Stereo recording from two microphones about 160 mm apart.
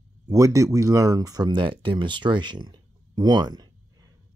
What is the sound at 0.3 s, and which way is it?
Speech, 20° right (ahead or behind).